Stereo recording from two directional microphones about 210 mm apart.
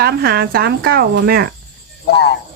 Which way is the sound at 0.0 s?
45° right (ahead or behind).